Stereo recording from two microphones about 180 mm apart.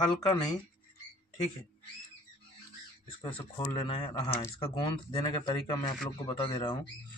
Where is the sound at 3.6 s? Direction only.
25° left (ahead or behind).